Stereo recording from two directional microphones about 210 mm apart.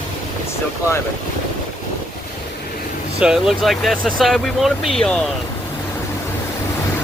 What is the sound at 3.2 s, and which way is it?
Speech, 5° right (ahead or behind).